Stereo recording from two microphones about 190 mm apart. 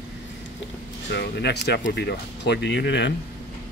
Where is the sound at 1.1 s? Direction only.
60° left (ahead or behind).